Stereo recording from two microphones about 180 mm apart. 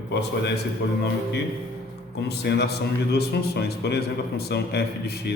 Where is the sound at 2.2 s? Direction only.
70° left (ahead or behind).